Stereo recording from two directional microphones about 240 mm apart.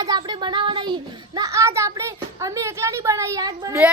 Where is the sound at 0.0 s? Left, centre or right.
Centre.